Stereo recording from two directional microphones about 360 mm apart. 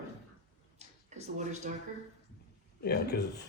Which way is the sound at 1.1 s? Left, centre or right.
Centre.